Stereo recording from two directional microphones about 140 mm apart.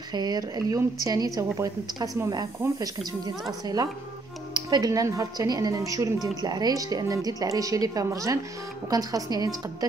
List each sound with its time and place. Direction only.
0.1 s speech: 30° right (ahead or behind)